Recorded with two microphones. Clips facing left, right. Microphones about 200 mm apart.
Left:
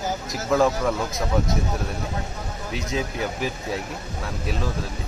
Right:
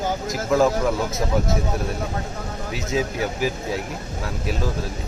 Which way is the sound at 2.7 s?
5° right (ahead or behind).